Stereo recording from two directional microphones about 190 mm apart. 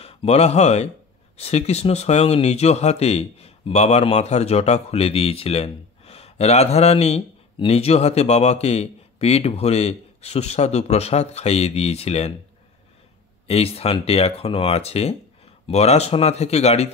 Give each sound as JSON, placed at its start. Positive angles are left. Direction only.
{"t": 0.0, "sound": "speech", "side_deg": 30}
{"t": 13.5, "sound": "speech", "side_deg": 30}